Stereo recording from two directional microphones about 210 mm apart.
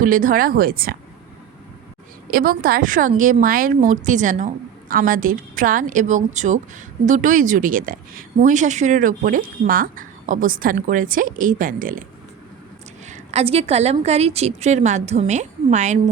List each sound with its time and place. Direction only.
0.0 s speech: 40° right (ahead or behind)
2.3 s a woman's voice: 45° right (ahead or behind)
13.1 s a woman's voice: 30° right (ahead or behind)